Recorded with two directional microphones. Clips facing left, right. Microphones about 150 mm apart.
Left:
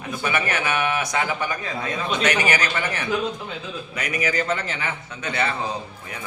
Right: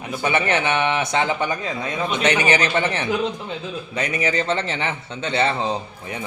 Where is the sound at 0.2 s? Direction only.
25° right (ahead or behind).